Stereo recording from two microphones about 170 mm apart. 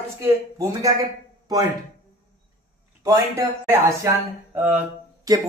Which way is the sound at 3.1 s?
15° right (ahead or behind).